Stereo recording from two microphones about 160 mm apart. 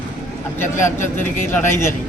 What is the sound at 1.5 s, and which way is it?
Speech, 15° left (ahead or behind).